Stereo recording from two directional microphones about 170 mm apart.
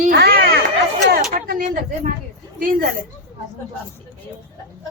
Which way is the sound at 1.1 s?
60° right (ahead or behind).